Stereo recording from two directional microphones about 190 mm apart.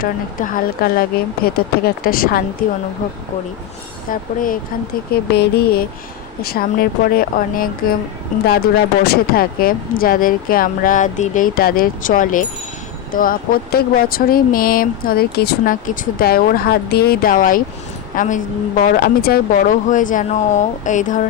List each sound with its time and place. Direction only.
0.0 s speech: 45° left (ahead or behind)
4.1 s speech: 45° left (ahead or behind)
5.1 s a sound: 55° left (ahead or behind)
6.4 s speech: 50° left (ahead or behind)